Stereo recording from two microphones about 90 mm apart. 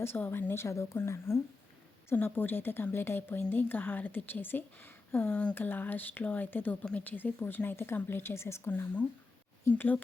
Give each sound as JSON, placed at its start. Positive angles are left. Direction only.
{"t": 0.0, "sound": "a woman's voice", "side_deg": 25}